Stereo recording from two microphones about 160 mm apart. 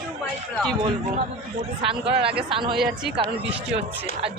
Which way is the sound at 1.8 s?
35° right (ahead or behind).